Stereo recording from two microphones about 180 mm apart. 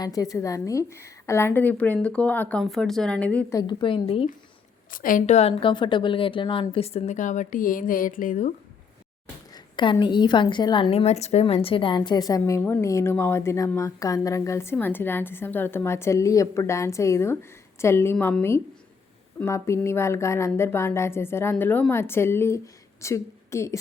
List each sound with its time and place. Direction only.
0.0 s a woman's voice: 20° left (ahead or behind)
3.6 s a woman's voice: 25° left (ahead or behind)
4.9 s a woman's voice: 50° left (ahead or behind)
9.7 s a woman's voice: 25° left (ahead or behind)